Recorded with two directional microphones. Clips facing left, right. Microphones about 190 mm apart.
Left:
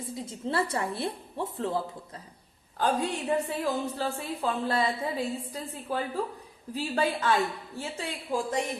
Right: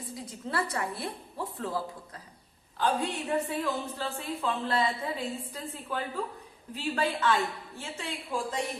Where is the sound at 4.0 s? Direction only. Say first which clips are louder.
Left 3 dB; 40° left (ahead or behind).